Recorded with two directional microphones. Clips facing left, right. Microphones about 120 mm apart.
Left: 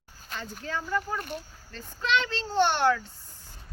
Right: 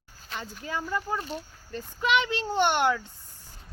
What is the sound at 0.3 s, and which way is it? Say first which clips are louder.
Speech: right 1 dB; 10° right (ahead or behind).